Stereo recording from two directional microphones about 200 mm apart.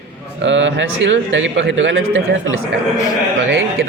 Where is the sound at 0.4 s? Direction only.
65° right (ahead or behind).